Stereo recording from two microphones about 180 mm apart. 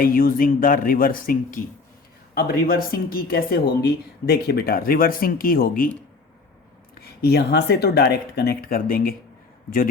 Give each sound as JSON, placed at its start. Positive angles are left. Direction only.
{"t": 0.0, "sound": "speech", "side_deg": 50}
{"t": 7.0, "sound": "speech", "side_deg": 65}